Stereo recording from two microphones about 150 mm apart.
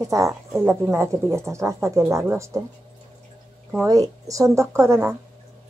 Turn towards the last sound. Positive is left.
turn(degrees=-15)  # may be behind; listen again after turning